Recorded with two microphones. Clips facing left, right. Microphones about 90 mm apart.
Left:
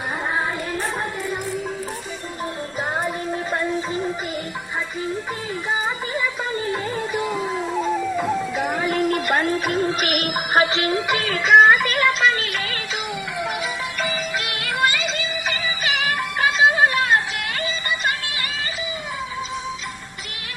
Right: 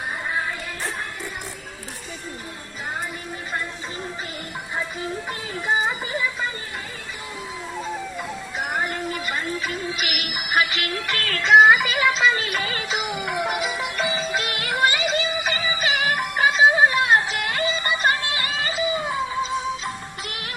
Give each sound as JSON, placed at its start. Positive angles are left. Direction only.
{"t": 8.9, "sound": "music", "side_deg": 80}
{"t": 12.4, "sound": "music", "side_deg": -25}
{"t": 13.4, "sound": "music", "side_deg": -10}
{"t": 14.1, "sound": "music", "side_deg": -25}
{"t": 16.1, "sound": "music", "side_deg": -15}